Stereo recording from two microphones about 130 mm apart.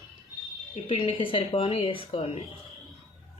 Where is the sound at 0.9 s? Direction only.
45° left (ahead or behind).